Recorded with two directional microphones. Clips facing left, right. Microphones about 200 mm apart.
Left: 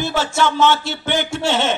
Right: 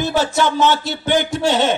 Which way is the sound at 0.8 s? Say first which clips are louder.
Right 3 dB; 40° right (ahead or behind).